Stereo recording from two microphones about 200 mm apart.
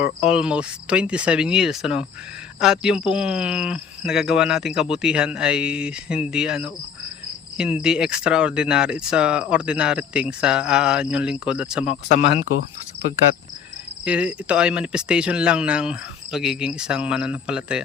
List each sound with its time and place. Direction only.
0.3 s speech: 5° right (ahead or behind)
12.0 s speech: 55° left (ahead or behind)
14.0 s speech: 5° right (ahead or behind)